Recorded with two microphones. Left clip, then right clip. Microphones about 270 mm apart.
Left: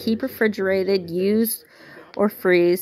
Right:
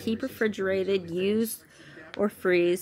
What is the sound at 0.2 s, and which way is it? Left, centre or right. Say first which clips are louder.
A woman's voice: left 6 dB; centre.